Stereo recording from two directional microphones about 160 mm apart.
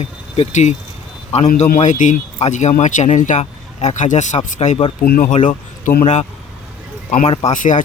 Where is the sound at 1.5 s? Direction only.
60° left (ahead or behind).